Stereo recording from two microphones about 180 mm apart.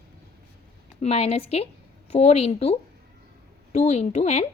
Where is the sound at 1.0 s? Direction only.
35° left (ahead or behind).